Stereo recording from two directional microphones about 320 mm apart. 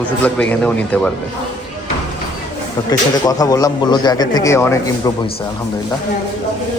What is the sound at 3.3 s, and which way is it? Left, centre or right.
Speech, centre.